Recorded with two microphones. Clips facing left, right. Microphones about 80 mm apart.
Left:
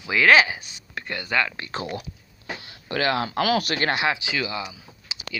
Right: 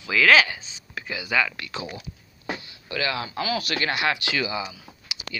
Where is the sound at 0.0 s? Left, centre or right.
Centre.